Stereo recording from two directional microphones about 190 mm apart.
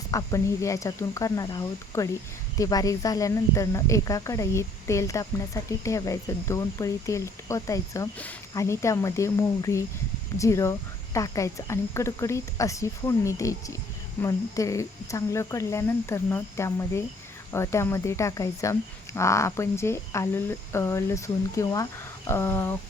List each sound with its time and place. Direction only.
0.1 s speech: 15° left (ahead or behind)